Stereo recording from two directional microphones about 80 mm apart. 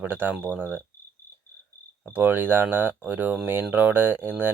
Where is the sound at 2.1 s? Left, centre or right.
Right.